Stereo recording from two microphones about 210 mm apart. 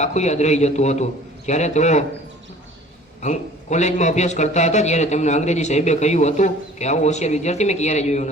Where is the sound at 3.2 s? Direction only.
35° left (ahead or behind).